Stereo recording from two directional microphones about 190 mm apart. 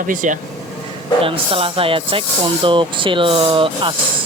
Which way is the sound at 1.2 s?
30° right (ahead or behind).